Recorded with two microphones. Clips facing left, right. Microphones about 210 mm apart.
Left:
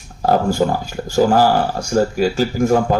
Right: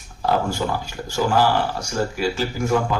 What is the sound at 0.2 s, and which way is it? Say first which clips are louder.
Speech: left 6 dB; 45° left (ahead or behind).